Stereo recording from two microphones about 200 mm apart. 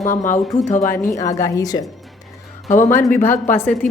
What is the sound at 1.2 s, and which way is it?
A woman's voice, 15° left (ahead or behind).